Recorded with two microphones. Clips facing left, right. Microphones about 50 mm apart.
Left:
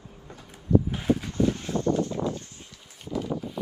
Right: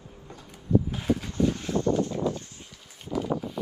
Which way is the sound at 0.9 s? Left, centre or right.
Left.